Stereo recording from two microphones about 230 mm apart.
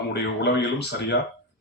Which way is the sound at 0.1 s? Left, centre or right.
Left.